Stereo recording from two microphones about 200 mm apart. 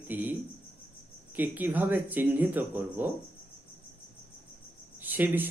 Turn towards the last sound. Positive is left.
turn(degrees=-10)  # may be behind; listen again after turning